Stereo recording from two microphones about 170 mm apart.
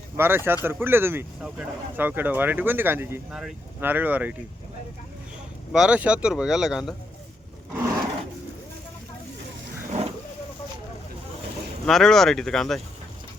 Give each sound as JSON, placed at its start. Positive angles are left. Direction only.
{"t": 0.2, "sound": "speech", "side_deg": -15}
{"t": 5.7, "sound": "speech", "side_deg": -5}
{"t": 9.8, "sound": "vehicle", "side_deg": -40}
{"t": 11.9, "sound": "speech", "side_deg": 0}